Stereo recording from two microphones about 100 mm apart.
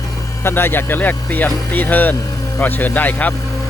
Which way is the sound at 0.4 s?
25° left (ahead or behind).